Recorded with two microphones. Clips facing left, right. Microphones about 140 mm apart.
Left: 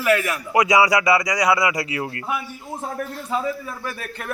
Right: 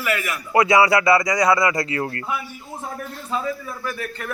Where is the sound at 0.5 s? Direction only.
15° left (ahead or behind).